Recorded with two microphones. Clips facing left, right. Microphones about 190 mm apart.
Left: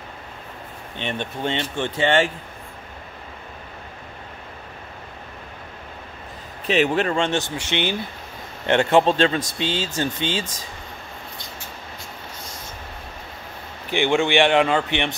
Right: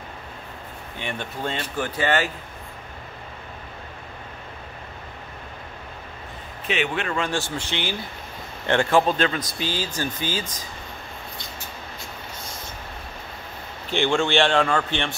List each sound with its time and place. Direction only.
0.9 s speech: 25° left (ahead or behind)
6.7 s speech: 35° left (ahead or behind)
13.8 s a man's voice: 15° left (ahead or behind)